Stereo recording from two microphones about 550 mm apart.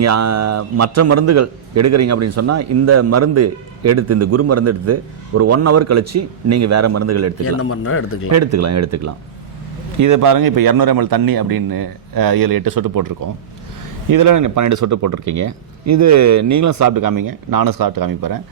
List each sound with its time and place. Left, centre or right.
0.0 s a man's voice: right
7.4 s a man's voice: left
8.3 s a man's voice: right